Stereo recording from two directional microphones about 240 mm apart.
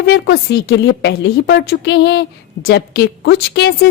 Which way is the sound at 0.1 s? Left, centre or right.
Left.